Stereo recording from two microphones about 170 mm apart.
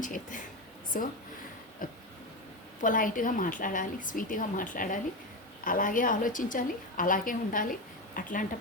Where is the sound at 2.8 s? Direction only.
50° left (ahead or behind).